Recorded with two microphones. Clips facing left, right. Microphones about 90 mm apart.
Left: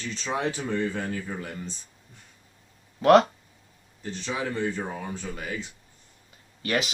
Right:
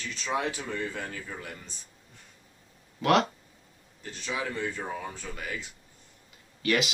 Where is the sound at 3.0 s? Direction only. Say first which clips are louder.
Left 7 dB; 35° left (ahead or behind).